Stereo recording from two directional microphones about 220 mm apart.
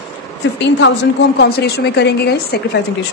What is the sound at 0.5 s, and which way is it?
A woman's voice, 55° left (ahead or behind).